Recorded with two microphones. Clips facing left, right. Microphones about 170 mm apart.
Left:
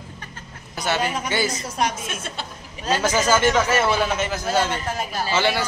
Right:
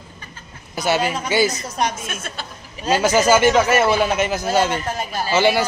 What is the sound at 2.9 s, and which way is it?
Speech, 10° right (ahead or behind).